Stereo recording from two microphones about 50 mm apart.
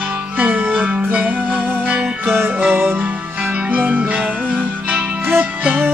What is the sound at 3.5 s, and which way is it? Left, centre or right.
Music, right.